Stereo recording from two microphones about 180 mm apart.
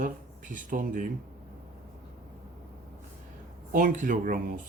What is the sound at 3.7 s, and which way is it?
Speech, 50° right (ahead or behind).